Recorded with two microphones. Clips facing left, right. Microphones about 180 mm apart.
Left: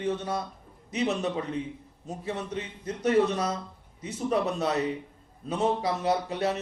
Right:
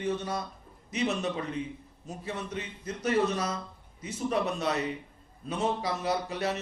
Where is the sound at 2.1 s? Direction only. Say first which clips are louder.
Left 3 dB; 30° left (ahead or behind).